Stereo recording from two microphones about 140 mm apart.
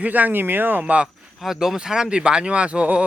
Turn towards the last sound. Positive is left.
turn(degrees=-10)  # may be behind; listen again after turning